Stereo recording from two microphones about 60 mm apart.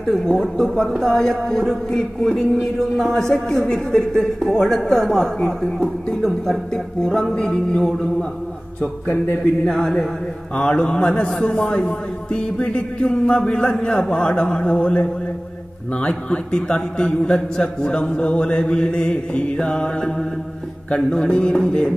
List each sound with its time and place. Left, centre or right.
0.0 s a man's voice: centre
9.7 s a man's voice: centre